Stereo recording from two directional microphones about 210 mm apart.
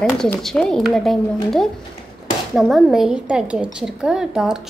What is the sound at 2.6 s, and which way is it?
A child's voice, centre (ahead or behind).